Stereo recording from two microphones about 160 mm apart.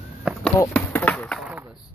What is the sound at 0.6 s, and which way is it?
Chop, 10° left (ahead or behind).